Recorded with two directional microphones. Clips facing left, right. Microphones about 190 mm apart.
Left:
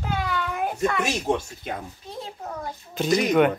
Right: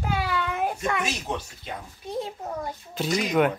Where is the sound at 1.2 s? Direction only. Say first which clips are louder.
Left 7 dB; 45° left (ahead or behind).